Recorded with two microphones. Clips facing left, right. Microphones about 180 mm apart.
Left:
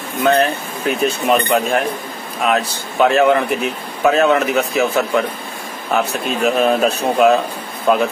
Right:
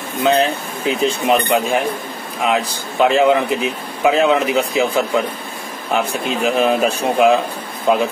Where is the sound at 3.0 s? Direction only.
15° right (ahead or behind).